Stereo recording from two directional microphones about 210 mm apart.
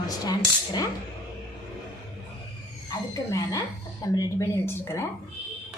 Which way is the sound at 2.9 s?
15° left (ahead or behind).